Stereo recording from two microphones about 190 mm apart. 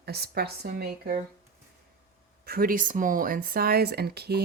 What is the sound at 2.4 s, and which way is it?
Speech, 50° right (ahead or behind).